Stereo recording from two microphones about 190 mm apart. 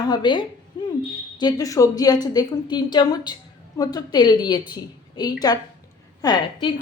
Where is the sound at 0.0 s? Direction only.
20° left (ahead or behind).